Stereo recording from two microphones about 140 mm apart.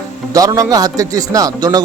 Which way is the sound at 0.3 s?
25° right (ahead or behind).